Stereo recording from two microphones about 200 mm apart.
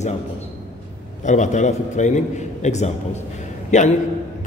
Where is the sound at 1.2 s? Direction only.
35° left (ahead or behind).